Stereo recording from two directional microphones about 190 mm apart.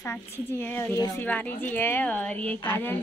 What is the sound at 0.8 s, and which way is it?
A woman's voice, 10° left (ahead or behind).